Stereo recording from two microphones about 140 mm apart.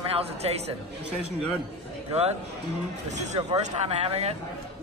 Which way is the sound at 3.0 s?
55° right (ahead or behind).